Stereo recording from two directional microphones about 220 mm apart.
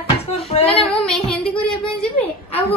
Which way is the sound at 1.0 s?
5° left (ahead or behind).